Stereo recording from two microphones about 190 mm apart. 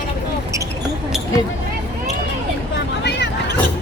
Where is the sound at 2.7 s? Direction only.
65° left (ahead or behind).